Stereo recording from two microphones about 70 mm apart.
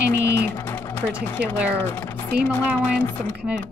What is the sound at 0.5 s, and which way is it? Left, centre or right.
Sewing machine, left.